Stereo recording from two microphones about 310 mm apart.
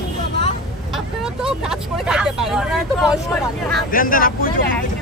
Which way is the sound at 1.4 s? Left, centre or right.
Centre.